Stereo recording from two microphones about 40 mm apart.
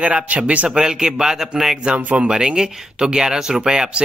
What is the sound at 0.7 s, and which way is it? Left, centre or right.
Speech, centre.